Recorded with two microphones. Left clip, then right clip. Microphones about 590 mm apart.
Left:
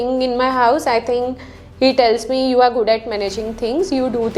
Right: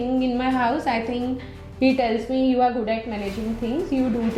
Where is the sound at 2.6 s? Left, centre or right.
Left.